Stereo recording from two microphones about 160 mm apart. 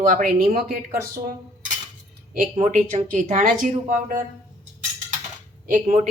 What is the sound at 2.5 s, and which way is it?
Speech, 50° right (ahead or behind).